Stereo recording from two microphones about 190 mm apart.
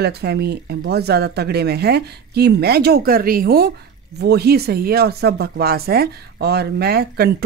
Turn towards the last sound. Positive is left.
turn(degrees=-55)  # may be behind; listen again after turning